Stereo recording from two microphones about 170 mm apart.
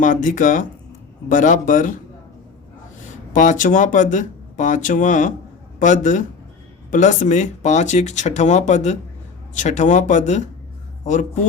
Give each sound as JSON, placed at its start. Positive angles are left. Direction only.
{"t": 0.0, "sound": "speech", "side_deg": 50}
{"t": 3.3, "sound": "speech", "side_deg": 50}